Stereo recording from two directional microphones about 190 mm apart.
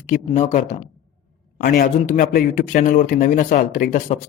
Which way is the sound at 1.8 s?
45° left (ahead or behind).